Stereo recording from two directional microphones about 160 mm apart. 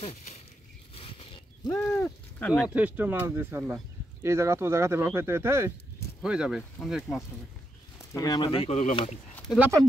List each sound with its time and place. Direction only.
0.0 s speech: 40° left (ahead or behind)
0.9 s a sound: 35° left (ahead or behind)
1.7 s speech: 10° left (ahead or behind)
2.7 s speech: 10° right (ahead or behind)
8.1 s speech: 25° left (ahead or behind)
8.5 s speech: 40° left (ahead or behind)